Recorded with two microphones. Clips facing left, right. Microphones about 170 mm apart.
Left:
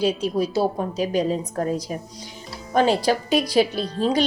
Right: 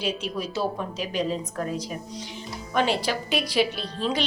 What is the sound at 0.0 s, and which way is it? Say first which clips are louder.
Speech: left 7 dB; 35° left (ahead or behind).